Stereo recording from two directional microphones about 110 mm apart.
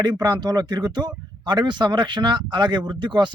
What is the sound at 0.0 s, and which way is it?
Speech, 40° right (ahead or behind).